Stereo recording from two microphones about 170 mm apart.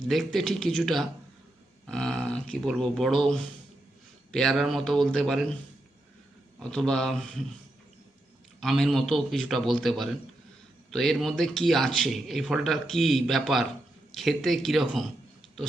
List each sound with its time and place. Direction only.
0.1 s speech: centre (ahead or behind)
6.6 s speech: 5° left (ahead or behind)
8.6 s speech: centre (ahead or behind)